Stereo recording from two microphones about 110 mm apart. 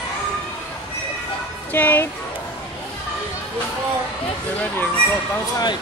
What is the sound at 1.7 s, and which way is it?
Speech, 15° left (ahead or behind).